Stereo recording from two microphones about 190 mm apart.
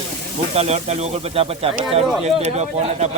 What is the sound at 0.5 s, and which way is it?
Speech, 35° right (ahead or behind).